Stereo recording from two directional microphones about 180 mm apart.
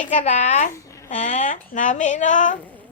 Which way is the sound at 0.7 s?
15° left (ahead or behind).